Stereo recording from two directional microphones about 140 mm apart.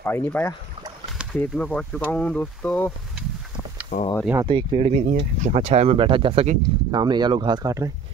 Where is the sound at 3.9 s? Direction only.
90° left.